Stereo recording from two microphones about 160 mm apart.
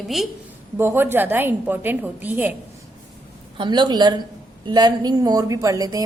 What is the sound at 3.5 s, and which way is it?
A woman's voice, 30° right (ahead or behind).